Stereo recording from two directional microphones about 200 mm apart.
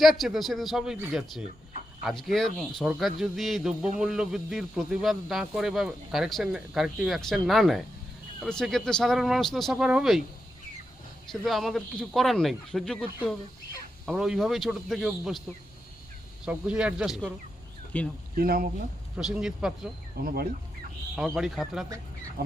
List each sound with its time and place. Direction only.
0.0 s speech: centre (ahead or behind)
11.3 s speech: centre (ahead or behind)
16.5 s speech: 5° right (ahead or behind)
17.9 s speech: 10° left (ahead or behind)
18.3 s speech: 50° right (ahead or behind)
19.1 s speech: centre (ahead or behind)
20.1 s speech: 50° right (ahead or behind)
21.2 s speech: centre (ahead or behind)